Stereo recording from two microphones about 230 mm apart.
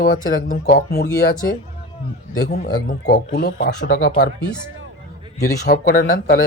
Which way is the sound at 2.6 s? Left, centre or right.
Left.